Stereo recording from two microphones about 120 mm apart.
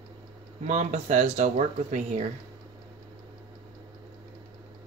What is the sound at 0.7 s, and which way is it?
Speech, 75° right (ahead or behind).